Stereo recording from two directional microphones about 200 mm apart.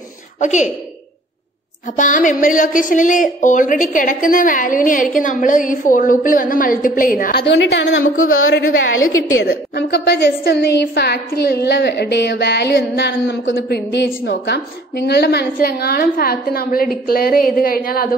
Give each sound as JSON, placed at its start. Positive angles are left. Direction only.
{"t": 0.4, "sound": "a woman's voice", "side_deg": 35}
{"t": 2.0, "sound": "a woman's voice", "side_deg": 40}
{"t": 7.5, "sound": "a woman's voice", "side_deg": 55}
{"t": 9.4, "sound": "a woman's voice", "side_deg": 55}